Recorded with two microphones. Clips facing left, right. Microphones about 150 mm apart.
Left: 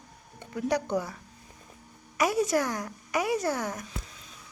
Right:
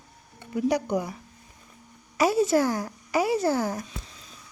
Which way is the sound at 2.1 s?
30° right (ahead or behind).